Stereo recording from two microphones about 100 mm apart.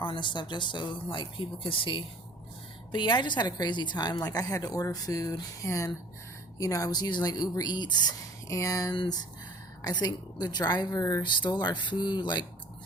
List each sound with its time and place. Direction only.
0.0 s a woman's voice: 55° left (ahead or behind)
8.4 s a woman's voice: 35° left (ahead or behind)
11.2 s speech: 50° left (ahead or behind)